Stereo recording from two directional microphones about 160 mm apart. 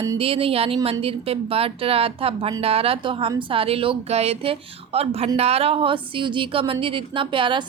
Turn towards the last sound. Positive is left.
turn(degrees=-30)  # may be behind; listen again after turning